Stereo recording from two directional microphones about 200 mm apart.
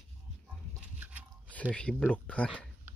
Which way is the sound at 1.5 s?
5° left (ahead or behind).